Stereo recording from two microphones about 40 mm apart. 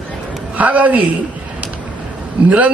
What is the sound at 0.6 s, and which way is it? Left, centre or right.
Speech, right.